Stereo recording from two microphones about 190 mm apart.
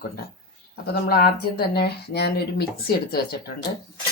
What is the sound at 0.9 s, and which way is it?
Speech, 55° left (ahead or behind).